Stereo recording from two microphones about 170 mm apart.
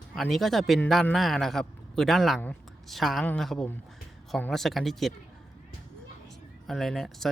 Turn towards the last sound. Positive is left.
turn(degrees=0)  # may be behind; listen again after turning